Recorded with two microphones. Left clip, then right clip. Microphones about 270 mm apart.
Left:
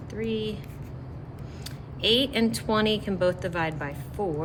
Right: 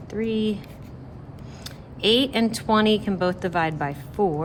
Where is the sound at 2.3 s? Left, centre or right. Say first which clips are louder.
Right 4 dB; centre.